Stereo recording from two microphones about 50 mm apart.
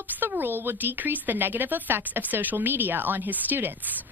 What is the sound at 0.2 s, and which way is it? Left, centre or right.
Speech, right.